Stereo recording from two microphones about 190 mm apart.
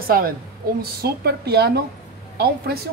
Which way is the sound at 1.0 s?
55° right (ahead or behind).